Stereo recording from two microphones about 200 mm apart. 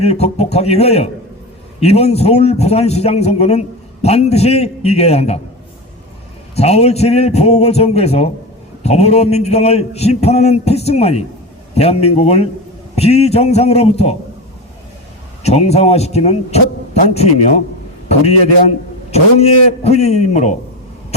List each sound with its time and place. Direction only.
0.0 s a man's voice: 30° left (ahead or behind)
6.6 s a man's voice: 30° left (ahead or behind)
15.4 s a man's voice: 30° left (ahead or behind)
19.1 s a man's voice: 30° left (ahead or behind)